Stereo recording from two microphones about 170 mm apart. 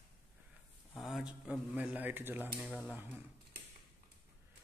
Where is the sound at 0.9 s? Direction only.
Centre (ahead or behind).